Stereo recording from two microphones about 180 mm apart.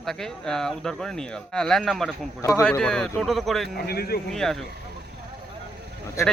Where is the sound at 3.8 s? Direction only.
60° left (ahead or behind).